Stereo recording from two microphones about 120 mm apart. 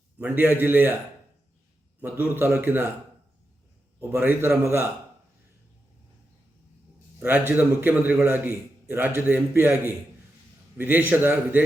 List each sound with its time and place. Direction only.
0.2 s a man's voice: 15° right (ahead or behind)
2.3 s a man's voice: 15° right (ahead or behind)
4.1 s a man's voice: 15° right (ahead or behind)
7.2 s a man's voice: 15° right (ahead or behind)